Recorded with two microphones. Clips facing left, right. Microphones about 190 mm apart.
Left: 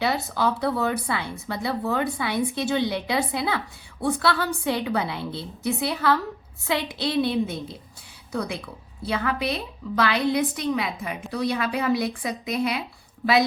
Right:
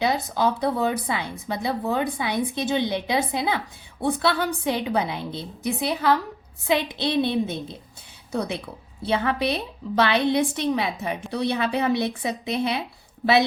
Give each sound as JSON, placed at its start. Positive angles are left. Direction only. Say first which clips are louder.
{"t": 0.0, "sound": "a woman's voice", "louder": "right 1 dB", "side_deg": -20}